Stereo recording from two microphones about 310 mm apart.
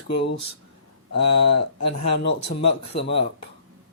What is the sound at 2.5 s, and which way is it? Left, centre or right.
Speech, left.